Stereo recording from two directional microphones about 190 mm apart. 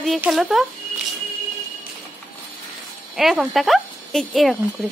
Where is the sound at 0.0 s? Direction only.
Centre (ahead or behind).